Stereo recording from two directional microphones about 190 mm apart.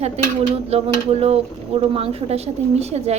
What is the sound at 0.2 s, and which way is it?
A woman's voice, 35° right (ahead or behind).